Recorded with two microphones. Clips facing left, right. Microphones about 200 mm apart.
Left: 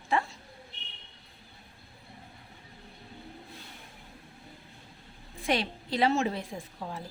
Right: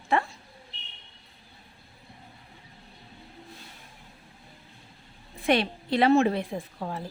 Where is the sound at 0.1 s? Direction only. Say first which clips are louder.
Right 3 dB; 60° right (ahead or behind).